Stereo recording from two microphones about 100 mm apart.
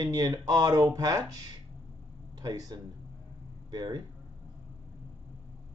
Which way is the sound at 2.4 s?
40° right (ahead or behind).